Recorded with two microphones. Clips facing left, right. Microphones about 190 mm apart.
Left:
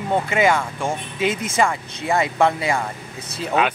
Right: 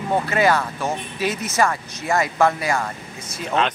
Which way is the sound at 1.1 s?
25° left (ahead or behind).